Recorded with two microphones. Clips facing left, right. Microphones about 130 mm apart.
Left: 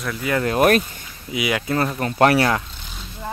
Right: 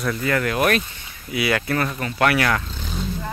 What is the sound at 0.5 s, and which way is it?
Speech, 40° left (ahead or behind).